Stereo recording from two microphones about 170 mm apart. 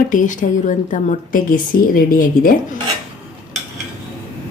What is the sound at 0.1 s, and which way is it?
Speech, 50° left (ahead or behind).